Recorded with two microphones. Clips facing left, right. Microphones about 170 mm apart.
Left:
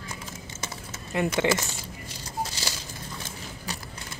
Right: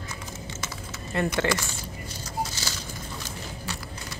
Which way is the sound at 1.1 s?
10° left (ahead or behind).